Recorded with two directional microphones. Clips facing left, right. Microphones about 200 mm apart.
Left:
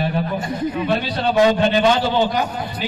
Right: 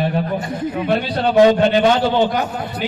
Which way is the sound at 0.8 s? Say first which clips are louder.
Right 5 dB; 55° right (ahead or behind).